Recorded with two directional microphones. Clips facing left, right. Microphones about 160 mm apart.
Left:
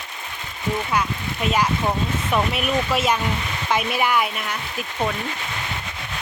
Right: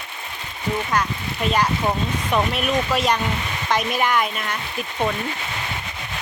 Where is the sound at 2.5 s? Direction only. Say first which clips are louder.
Right 1 dB; 5° left (ahead or behind).